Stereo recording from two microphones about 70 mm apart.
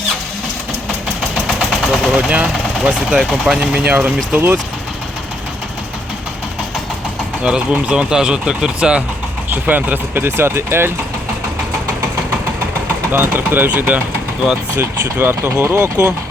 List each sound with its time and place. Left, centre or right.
1.5 s machine gun: centre
2.1 s speech: centre
3.1 s speech: centre
3.8 s speech: right
7.4 s speech: centre
9.5 s speech: right
10.2 s speech: right
13.1 s speech: right